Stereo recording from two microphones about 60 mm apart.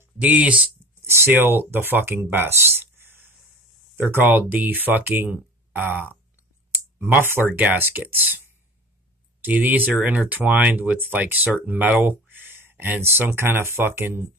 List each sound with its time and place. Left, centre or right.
0.2 s speech: right
1.0 s speech: right
9.4 s speech: right
11.0 s speech: right